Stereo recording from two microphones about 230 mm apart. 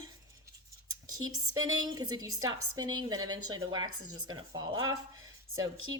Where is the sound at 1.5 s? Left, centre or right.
Centre.